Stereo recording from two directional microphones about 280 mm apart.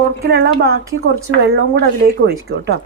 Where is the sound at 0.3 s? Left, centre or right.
Right.